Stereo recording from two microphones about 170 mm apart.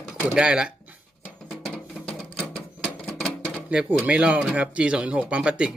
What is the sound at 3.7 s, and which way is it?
Speech, 5° right (ahead or behind).